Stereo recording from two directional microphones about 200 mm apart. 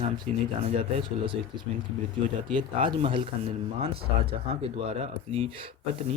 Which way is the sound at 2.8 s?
25° right (ahead or behind).